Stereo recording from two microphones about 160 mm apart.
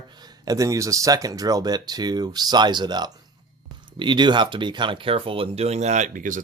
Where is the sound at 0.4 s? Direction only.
20° right (ahead or behind).